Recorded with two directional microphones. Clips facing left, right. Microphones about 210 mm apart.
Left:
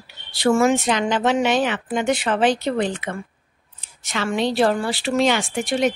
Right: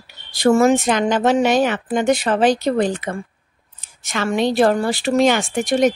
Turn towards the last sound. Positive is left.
turn(degrees=-45)  # may be behind; listen again after turning